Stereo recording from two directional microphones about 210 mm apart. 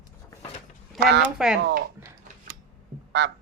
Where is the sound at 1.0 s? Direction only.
55° right (ahead or behind).